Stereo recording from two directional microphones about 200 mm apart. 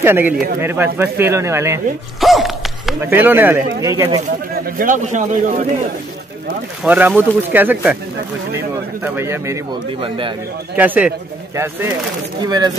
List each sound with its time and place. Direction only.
0.0 s speech: 10° right (ahead or behind)
2.1 s a sound: centre (ahead or behind)
3.0 s speech: 10° right (ahead or behind)
4.7 s speech: 40° right (ahead or behind)
6.8 s speech: 10° right (ahead or behind)
10.0 s speech: 25° right (ahead or behind)
10.8 s speech: 10° right (ahead or behind)